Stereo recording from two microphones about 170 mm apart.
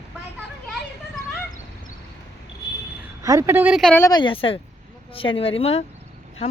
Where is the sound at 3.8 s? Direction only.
5° left (ahead or behind).